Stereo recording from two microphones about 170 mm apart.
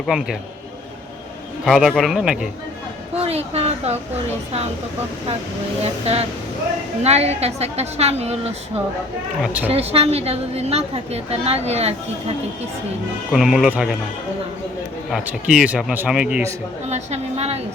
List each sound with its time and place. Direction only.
0.0 s a man's voice: 5° right (ahead or behind)
1.6 s a man's voice: centre (ahead or behind)
3.2 s a woman's voice: 35° right (ahead or behind)
5.8 s a woman's voice: 35° right (ahead or behind)
9.4 s a man's voice: 10° right (ahead or behind)
9.6 s a woman's voice: 35° right (ahead or behind)
13.3 s a man's voice: centre (ahead or behind)
15.1 s a man's voice: 5° right (ahead or behind)
16.9 s a woman's voice: 40° right (ahead or behind)